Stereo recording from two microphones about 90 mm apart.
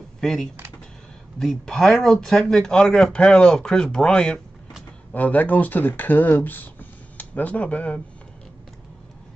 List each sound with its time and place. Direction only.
0.2 s speech: 5° left (ahead or behind)
5.1 s speech: 20° left (ahead or behind)